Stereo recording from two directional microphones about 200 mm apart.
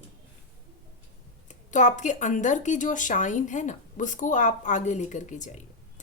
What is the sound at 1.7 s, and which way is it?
A woman's voice, 40° left (ahead or behind).